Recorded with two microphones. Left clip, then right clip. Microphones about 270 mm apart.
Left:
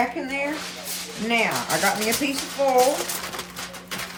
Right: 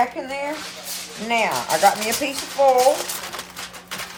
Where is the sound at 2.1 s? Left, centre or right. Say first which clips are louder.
Right 1 dB; centre.